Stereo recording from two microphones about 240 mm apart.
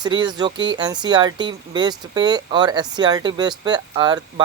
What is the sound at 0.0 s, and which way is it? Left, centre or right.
Speech, centre.